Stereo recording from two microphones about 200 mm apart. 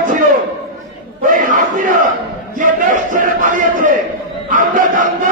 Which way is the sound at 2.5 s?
40° right (ahead or behind).